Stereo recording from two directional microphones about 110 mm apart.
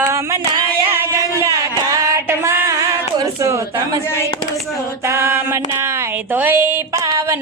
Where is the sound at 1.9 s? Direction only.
30° right (ahead or behind).